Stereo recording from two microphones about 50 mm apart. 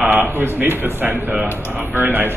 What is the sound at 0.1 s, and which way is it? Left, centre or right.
A man's voice, right.